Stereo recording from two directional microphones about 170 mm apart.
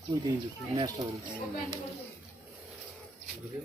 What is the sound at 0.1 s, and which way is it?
Speech, 25° right (ahead or behind).